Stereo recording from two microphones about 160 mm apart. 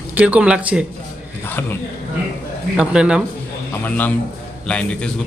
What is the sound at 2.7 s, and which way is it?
Speech, 5° right (ahead or behind).